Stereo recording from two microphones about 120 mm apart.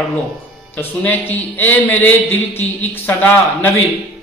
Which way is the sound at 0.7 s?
15° left (ahead or behind).